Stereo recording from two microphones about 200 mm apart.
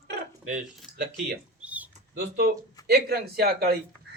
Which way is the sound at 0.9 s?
25° right (ahead or behind).